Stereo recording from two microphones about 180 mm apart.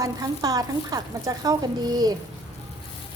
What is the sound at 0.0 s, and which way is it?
Speech, 20° right (ahead or behind).